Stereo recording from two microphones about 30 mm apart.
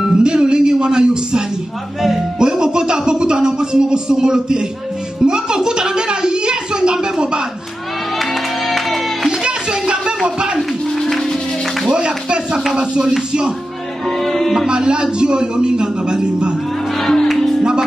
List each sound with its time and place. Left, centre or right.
0.0 s speech: right
2.0 s speech: centre
2.3 s speech: right
5.2 s a sound: right
8.2 s music: centre
9.3 s children playing: right
11.0 s music: centre
11.9 s a sound: right
14.0 s music: centre
14.7 s speech: right
17.4 s music: centre